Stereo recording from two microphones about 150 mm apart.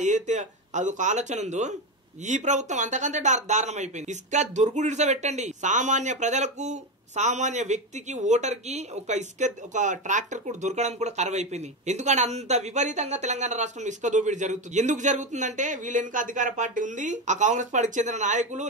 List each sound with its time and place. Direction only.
0.0 s speech: 55° right (ahead or behind)